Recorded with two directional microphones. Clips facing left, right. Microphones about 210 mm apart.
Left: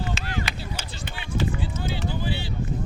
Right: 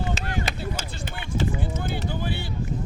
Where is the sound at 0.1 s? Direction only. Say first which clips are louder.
Right 2 dB; 45° right (ahead or behind).